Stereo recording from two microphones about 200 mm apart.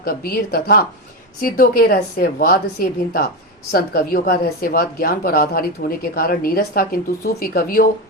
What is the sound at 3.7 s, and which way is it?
A woman's voice, 50° left (ahead or behind).